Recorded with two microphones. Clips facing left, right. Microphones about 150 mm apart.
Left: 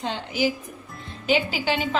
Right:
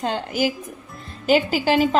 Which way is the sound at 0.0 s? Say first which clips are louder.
Right 3 dB; 50° right (ahead or behind).